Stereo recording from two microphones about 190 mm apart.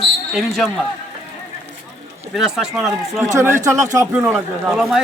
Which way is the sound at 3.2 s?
15° right (ahead or behind).